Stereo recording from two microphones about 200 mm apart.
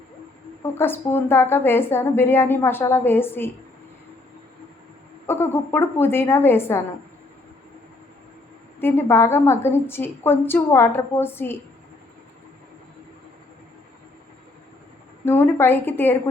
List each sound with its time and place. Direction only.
0.6 s a woman's voice: 10° left (ahead or behind)
5.2 s a woman's voice: 10° left (ahead or behind)
8.8 s a woman's voice: 10° left (ahead or behind)
15.2 s a woman's voice: 10° left (ahead or behind)